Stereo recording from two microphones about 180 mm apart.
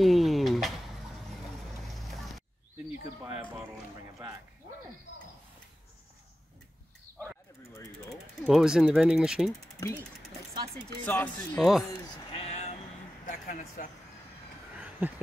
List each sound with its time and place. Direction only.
0.0 s a sound: centre (ahead or behind)
1.9 s vehicle: centre (ahead or behind)
7.7 s jackhammer: 15° left (ahead or behind)
8.4 s speech: centre (ahead or behind)
11.1 s speech: 10° left (ahead or behind)
11.9 s bleat: 25° left (ahead or behind)
13.3 s speech: 45° left (ahead or behind)
14.8 s a sound: 10° right (ahead or behind)